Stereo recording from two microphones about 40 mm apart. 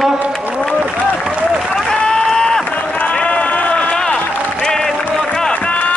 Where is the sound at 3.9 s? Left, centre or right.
Left.